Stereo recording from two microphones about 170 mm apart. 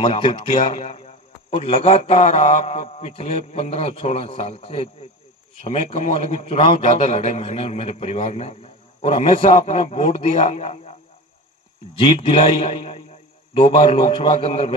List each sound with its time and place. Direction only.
0.0 s a man's voice: 30° left (ahead or behind)
12.0 s a man's voice: 35° left (ahead or behind)